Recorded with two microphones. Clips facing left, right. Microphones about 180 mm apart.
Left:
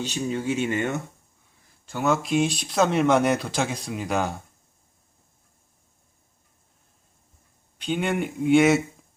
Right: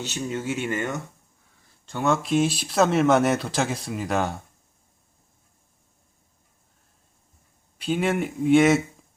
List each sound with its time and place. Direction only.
0.0 s speech: 15° left (ahead or behind)
1.9 s speech: 5° left (ahead or behind)
7.8 s speech: 5° right (ahead or behind)